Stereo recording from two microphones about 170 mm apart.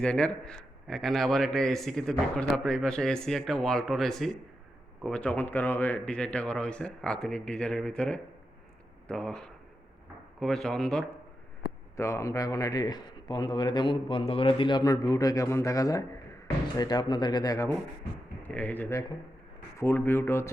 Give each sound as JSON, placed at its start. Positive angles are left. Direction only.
{"t": 0.0, "sound": "a man's voice", "side_deg": 5}
{"t": 10.4, "sound": "a man's voice", "side_deg": 0}
{"t": 11.9, "sound": "a man's voice", "side_deg": 15}
{"t": 18.4, "sound": "speech", "side_deg": 10}